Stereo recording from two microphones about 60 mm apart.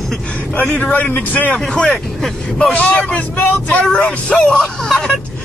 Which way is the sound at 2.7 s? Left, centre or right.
Left.